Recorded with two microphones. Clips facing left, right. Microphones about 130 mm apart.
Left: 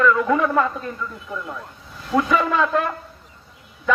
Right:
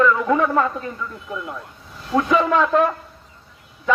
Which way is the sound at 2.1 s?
Centre (ahead or behind).